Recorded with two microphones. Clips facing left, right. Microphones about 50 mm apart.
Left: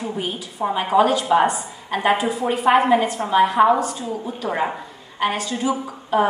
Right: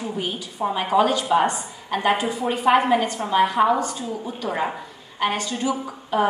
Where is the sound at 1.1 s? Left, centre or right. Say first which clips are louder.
Left 2 dB; centre.